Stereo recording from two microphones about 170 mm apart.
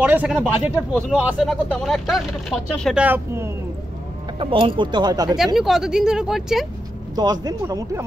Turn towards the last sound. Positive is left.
turn(degrees=-20)  # may be behind; listen again after turning